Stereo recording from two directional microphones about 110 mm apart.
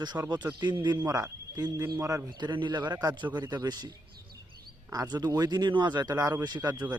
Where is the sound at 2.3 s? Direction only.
45° right (ahead or behind).